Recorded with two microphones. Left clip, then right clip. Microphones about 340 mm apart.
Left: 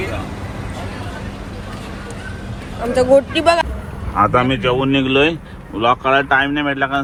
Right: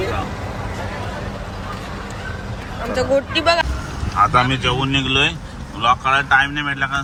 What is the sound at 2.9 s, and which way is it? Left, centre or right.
Speech, centre.